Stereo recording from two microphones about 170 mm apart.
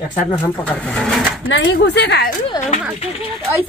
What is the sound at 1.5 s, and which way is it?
Speech, 90° left.